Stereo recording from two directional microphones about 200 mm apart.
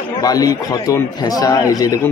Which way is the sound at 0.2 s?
20° left (ahead or behind).